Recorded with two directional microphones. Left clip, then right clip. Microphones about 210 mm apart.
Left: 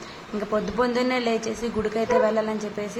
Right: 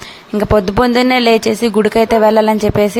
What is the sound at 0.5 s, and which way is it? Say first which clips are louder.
A woman's voice: right 12 dB; 45° right (ahead or behind).